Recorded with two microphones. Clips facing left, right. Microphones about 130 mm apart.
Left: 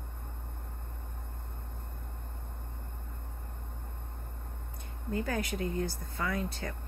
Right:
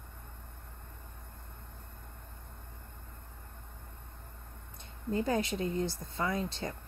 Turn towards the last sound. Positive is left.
turn(degrees=-25)  # may be behind; listen again after turning